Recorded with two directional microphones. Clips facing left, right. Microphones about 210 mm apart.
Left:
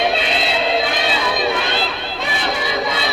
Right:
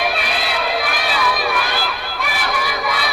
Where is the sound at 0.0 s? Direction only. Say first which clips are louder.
Left 3 dB; 25° left (ahead or behind).